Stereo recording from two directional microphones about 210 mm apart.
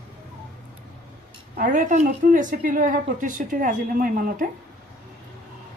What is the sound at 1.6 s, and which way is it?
A woman's voice, 35° right (ahead or behind).